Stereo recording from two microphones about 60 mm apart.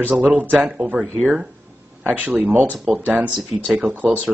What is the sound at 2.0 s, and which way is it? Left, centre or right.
Speech, right.